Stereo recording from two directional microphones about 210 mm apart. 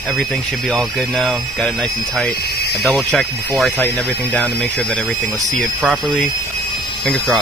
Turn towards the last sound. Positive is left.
turn(degrees=0)  # may be behind; listen again after turning